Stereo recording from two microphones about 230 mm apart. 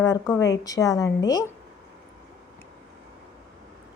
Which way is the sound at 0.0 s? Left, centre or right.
Centre.